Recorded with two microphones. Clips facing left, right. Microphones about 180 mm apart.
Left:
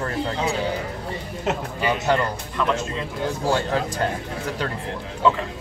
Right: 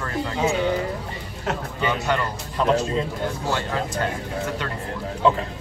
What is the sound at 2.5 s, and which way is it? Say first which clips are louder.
Speech: right 6 dB; 35° right (ahead or behind).